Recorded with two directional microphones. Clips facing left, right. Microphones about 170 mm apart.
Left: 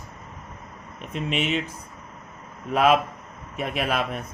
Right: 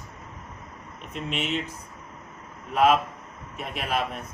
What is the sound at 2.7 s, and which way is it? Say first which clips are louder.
Speech: left 1 dB; 75° left (ahead or behind).